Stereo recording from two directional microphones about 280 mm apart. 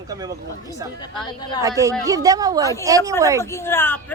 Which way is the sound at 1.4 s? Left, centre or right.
Centre.